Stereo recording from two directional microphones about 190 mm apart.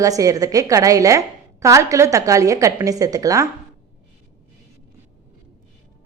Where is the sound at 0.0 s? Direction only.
20° right (ahead or behind).